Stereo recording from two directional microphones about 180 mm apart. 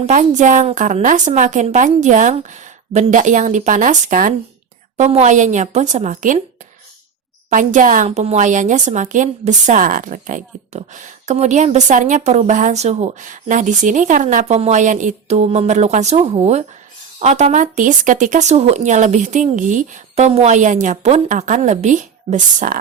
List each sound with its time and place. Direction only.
0.0 s a woman's voice: 45° right (ahead or behind)
7.5 s a woman's voice: 45° right (ahead or behind)